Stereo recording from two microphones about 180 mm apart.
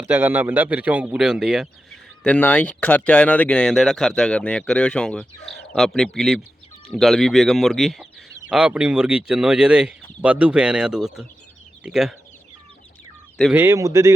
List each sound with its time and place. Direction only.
0.0 s speech: 10° right (ahead or behind)
13.5 s a man's voice: 15° right (ahead or behind)